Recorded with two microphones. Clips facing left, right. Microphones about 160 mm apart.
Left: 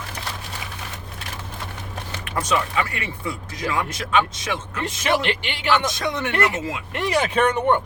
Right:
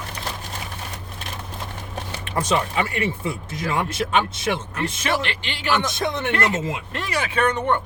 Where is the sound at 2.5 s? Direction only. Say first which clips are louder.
Even; 25° right (ahead or behind).